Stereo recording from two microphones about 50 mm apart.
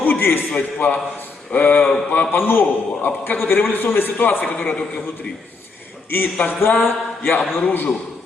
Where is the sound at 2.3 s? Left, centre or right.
Left.